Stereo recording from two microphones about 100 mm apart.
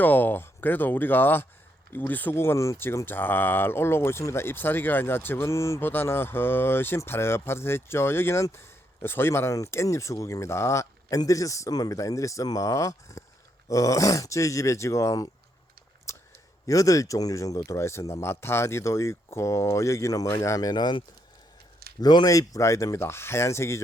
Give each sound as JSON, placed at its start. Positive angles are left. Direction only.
{"t": 0.0, "sound": "speech", "side_deg": 20}
{"t": 16.1, "sound": "a sound", "side_deg": 30}
{"t": 16.6, "sound": "speech", "side_deg": 35}
{"t": 22.0, "sound": "speech", "side_deg": 40}